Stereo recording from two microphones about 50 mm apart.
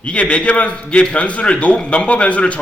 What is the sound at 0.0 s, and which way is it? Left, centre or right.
A man's voice, left.